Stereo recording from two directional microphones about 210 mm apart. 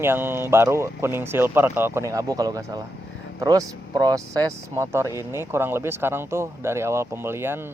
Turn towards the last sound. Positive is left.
turn(degrees=-10)  # may be behind; listen again after turning